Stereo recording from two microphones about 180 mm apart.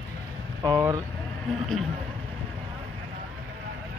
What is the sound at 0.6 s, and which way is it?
Speech, 15° right (ahead or behind).